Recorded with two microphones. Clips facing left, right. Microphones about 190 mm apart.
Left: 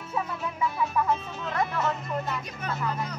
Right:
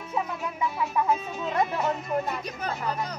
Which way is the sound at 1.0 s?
10° right (ahead or behind).